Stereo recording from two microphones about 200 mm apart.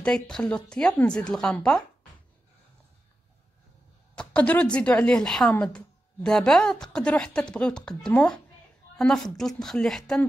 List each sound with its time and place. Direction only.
0.0 s speech: 5° left (ahead or behind)
4.2 s speech: 5° left (ahead or behind)